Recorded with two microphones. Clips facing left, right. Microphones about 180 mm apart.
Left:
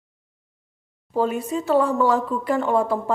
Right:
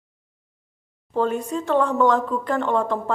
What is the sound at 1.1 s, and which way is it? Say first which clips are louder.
A woman's voice: even; 10° left (ahead or behind).